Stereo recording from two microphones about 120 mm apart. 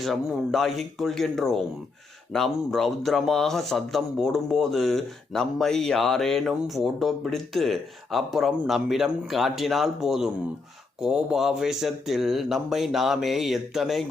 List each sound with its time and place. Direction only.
0.0 s speech: centre (ahead or behind)